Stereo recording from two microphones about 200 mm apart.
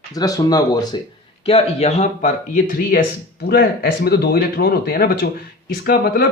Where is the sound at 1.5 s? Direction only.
30° left (ahead or behind).